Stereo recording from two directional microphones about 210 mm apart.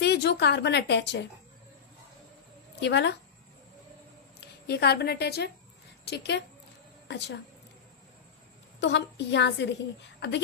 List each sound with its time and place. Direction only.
0.0 s speech: 55° left (ahead or behind)
2.8 s a woman's voice: 55° left (ahead or behind)
4.6 s a woman's voice: 50° left (ahead or behind)
8.8 s a woman's voice: 55° left (ahead or behind)